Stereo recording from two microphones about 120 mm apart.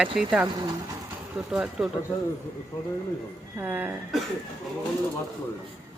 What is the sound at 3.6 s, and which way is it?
Speech, 15° right (ahead or behind).